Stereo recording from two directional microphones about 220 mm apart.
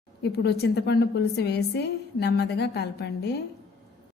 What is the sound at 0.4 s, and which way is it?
A woman's voice, 50° left (ahead or behind).